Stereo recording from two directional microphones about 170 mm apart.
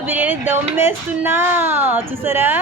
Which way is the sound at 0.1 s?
10° right (ahead or behind).